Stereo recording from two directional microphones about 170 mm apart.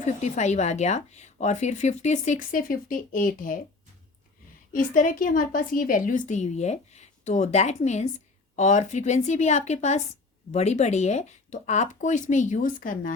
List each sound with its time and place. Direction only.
0.0 s speech: 45° left (ahead or behind)
4.7 s speech: 50° left (ahead or behind)